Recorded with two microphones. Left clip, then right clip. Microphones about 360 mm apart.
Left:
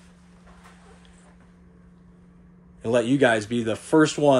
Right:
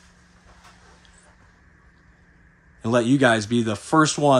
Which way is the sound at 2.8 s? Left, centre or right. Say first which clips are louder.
Right 1 dB; centre.